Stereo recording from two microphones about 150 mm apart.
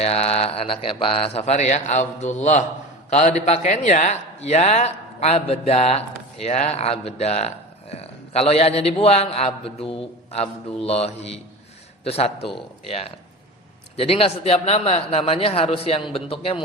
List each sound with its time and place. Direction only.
0.0 s a man's voice: 45° left (ahead or behind)